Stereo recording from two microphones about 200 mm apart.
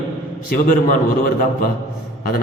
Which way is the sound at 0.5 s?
40° left (ahead or behind).